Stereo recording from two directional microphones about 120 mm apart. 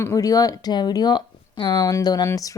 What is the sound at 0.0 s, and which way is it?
A woman's voice, 25° left (ahead or behind).